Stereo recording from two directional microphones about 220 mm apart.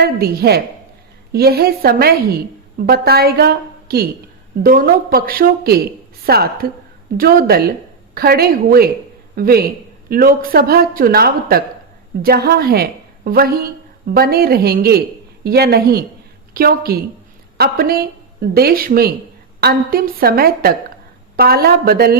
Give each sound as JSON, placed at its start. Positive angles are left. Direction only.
{"t": 0.0, "sound": "a woman's voice", "side_deg": -45}